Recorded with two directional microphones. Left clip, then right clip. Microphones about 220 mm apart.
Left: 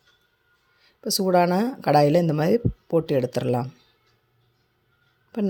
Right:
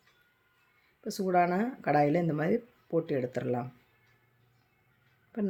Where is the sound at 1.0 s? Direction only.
35° left (ahead or behind).